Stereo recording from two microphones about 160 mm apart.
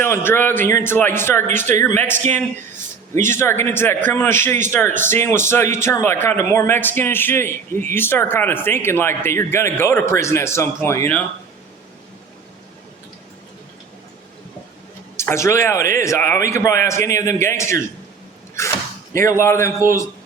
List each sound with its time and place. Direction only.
0.0 s a man's voice: 15° left (ahead or behind)
15.1 s a man's voice: 15° left (ahead or behind)